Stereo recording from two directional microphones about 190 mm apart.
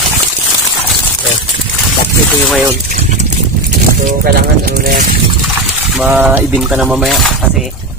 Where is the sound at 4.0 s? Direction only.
50° right (ahead or behind).